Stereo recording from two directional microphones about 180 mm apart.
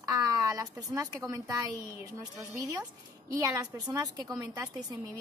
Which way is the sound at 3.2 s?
20° right (ahead or behind).